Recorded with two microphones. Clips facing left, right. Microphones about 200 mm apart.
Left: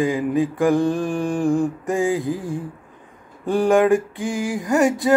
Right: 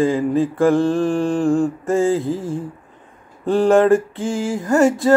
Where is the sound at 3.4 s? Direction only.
15° left (ahead or behind).